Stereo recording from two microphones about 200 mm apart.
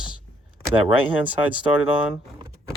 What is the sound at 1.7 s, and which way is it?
Speech, 5° right (ahead or behind).